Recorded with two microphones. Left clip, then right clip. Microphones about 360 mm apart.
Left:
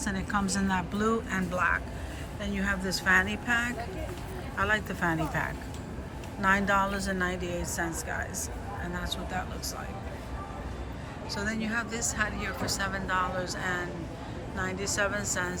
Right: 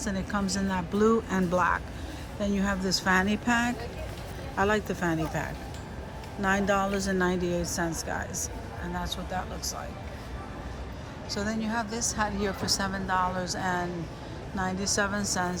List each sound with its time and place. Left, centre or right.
0.0 s a woman's voice: centre
11.3 s a woman's voice: centre